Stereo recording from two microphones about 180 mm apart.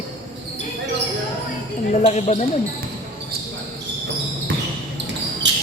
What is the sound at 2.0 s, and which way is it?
Speech, 40° left (ahead or behind).